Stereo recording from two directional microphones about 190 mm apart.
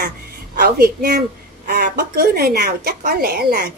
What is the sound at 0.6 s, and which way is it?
Speech, 50° right (ahead or behind).